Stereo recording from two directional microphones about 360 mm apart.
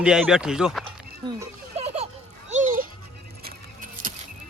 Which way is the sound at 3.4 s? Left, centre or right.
Right.